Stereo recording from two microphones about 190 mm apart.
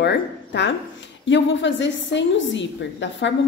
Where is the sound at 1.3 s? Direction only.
75° left (ahead or behind).